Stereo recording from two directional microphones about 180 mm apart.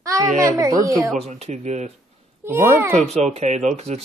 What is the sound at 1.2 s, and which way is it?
Speech, 40° right (ahead or behind).